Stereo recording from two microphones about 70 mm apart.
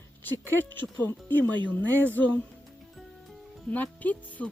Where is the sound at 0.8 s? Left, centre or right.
Left.